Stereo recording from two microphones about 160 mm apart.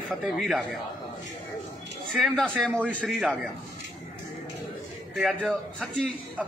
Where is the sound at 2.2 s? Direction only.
Centre (ahead or behind).